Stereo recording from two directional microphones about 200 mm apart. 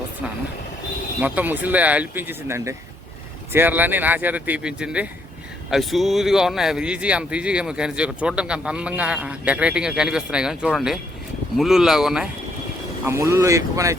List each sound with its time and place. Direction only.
1.2 s speech: 10° right (ahead or behind)
13.1 s speech: 15° right (ahead or behind)